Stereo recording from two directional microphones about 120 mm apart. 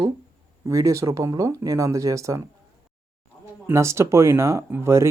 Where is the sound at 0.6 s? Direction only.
25° right (ahead or behind).